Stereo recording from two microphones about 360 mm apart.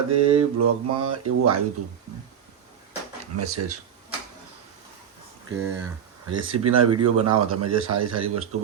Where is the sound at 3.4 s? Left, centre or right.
Right.